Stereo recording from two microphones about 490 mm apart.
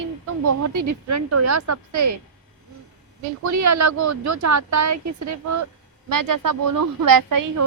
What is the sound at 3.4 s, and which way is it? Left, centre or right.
Speech, right.